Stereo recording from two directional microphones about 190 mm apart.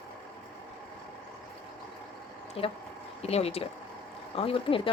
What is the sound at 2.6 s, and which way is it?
Speech, 30° left (ahead or behind).